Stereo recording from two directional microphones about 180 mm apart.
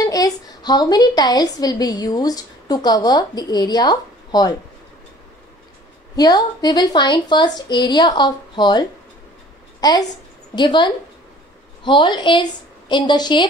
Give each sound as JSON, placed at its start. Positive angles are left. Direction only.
{"t": 0.0, "sound": "a woman's voice", "side_deg": 20}
{"t": 6.1, "sound": "a woman's voice", "side_deg": 20}